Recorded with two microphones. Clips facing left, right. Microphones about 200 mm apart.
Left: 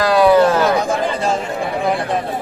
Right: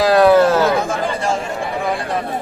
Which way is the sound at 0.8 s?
20° left (ahead or behind).